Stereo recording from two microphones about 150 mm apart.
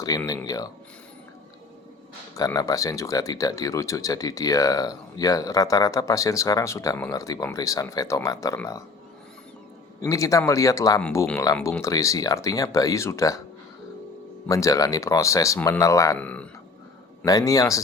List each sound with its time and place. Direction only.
0.1 s speech: 25° left (ahead or behind)
2.3 s speech: 20° left (ahead or behind)
10.0 s speech: 20° left (ahead or behind)
14.4 s speech: 20° left (ahead or behind)
16.1 s speech: 10° left (ahead or behind)
17.2 s speech: 25° left (ahead or behind)